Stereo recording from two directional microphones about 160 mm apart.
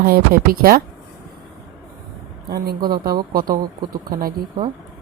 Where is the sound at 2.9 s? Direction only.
70° right (ahead or behind).